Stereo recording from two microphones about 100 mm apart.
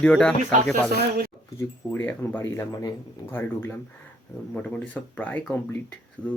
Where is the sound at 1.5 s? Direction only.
20° left (ahead or behind).